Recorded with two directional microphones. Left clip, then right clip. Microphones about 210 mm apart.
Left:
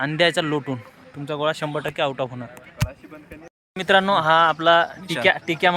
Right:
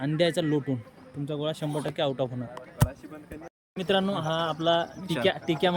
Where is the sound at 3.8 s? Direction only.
5° left (ahead or behind).